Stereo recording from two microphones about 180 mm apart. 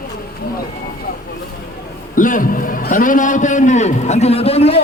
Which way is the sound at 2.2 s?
45° left (ahead or behind).